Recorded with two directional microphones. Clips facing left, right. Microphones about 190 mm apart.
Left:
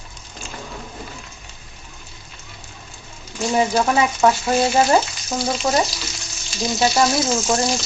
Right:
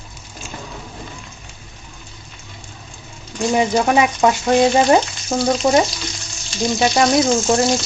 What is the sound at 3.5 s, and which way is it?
Frying, 20° right (ahead or behind).